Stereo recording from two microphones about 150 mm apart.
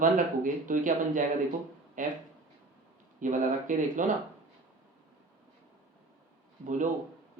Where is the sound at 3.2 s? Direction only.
60° right (ahead or behind).